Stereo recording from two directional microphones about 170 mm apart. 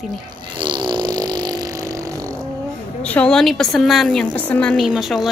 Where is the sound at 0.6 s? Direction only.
25° right (ahead or behind).